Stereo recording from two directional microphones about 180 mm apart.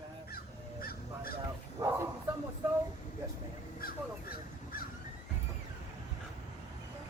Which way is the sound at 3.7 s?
55° left (ahead or behind).